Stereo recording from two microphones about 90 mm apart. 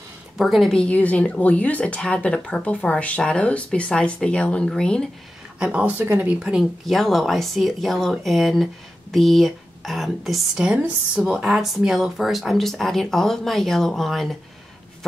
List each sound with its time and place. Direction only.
0.4 s speech: centre (ahead or behind)
5.6 s speech: 15° right (ahead or behind)
6.5 s speech: centre (ahead or behind)